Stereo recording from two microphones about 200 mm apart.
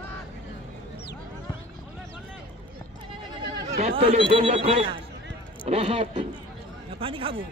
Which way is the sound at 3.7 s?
30° right (ahead or behind).